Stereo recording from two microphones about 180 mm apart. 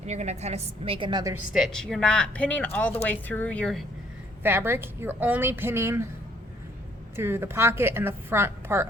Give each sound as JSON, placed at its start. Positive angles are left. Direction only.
{"t": 0.0, "sound": "a woman's voice", "side_deg": -40}
{"t": 1.5, "sound": "speech", "side_deg": 0}
{"t": 4.4, "sound": "a woman's voice", "side_deg": -15}
{"t": 7.2, "sound": "a woman's voice", "side_deg": -15}